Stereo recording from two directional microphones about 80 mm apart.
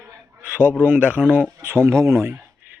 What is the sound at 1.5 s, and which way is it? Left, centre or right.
Speech, right.